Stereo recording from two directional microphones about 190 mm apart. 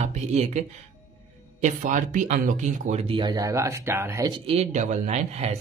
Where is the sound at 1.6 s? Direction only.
45° right (ahead or behind).